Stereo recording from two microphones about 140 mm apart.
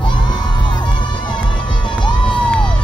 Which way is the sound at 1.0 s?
35° left (ahead or behind).